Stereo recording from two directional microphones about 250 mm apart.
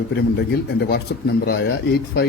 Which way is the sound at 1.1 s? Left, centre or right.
Left.